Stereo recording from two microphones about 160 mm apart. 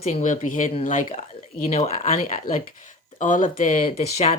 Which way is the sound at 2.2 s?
60° left (ahead or behind).